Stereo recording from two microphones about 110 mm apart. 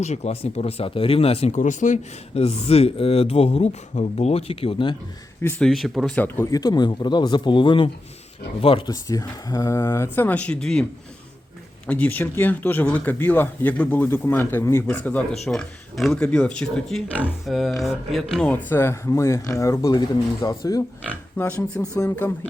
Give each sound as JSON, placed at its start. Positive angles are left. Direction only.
{"t": 0.0, "sound": "speech", "side_deg": 85}
{"t": 5.5, "sound": "speech", "side_deg": 0}
{"t": 6.1, "sound": "speech", "side_deg": 20}
{"t": 6.5, "sound": "a man's voice", "side_deg": 35}
{"t": 8.9, "sound": "speech", "side_deg": 35}
{"t": 11.9, "sound": "speech", "side_deg": 15}
{"t": 15.4, "sound": "speech", "side_deg": 5}
{"t": 17.4, "sound": "speech", "side_deg": 0}
{"t": 18.7, "sound": "speech", "side_deg": 25}
{"t": 21.3, "sound": "speech", "side_deg": 15}